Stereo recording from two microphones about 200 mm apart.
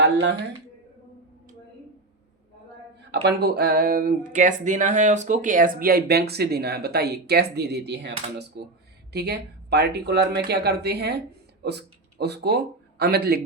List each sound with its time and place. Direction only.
0.0 s speech: 60° right (ahead or behind)
3.1 s speech: 55° right (ahead or behind)